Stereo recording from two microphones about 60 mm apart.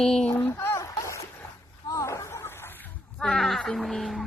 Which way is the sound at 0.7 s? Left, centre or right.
Left.